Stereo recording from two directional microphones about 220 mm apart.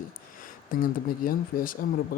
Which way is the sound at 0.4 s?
40° left (ahead or behind).